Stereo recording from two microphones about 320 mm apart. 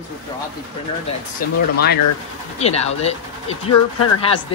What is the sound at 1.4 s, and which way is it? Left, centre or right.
Speech, left.